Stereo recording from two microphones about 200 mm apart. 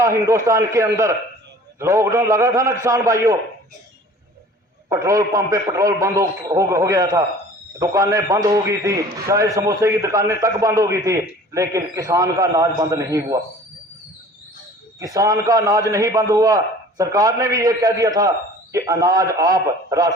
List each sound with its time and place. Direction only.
0.0 s a man's voice: 15° right (ahead or behind)
4.9 s a man's voice: 15° right (ahead or behind)
14.9 s a man's voice: 15° right (ahead or behind)